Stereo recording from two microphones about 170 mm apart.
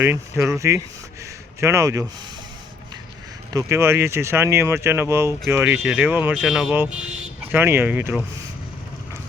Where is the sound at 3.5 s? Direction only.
15° right (ahead or behind).